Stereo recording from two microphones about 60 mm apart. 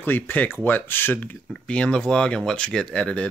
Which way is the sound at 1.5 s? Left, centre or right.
Centre.